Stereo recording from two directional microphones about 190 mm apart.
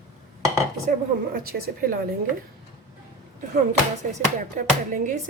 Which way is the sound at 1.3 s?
50° right (ahead or behind).